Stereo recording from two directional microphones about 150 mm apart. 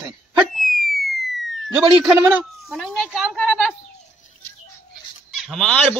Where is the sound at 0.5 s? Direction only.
60° left (ahead or behind).